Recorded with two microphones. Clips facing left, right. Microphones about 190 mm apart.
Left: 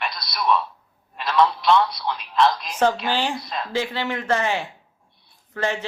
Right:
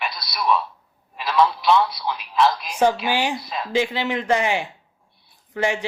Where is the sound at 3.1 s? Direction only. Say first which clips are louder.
Right 1 dB; 15° right (ahead or behind).